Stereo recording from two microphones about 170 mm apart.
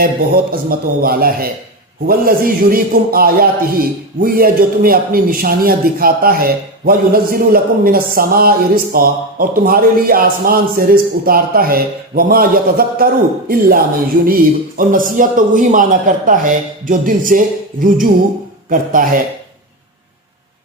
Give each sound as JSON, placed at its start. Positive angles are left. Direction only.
{"t": 0.7, "sound": "a man's voice", "side_deg": -60}